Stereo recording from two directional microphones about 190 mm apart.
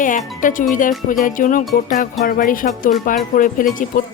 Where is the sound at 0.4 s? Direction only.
45° left (ahead or behind).